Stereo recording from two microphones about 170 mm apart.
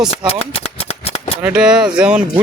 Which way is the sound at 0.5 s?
35° left (ahead or behind).